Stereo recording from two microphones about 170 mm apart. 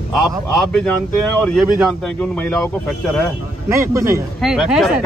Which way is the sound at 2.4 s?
5° left (ahead or behind).